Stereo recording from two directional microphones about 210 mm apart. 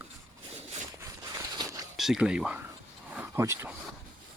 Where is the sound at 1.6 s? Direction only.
15° right (ahead or behind).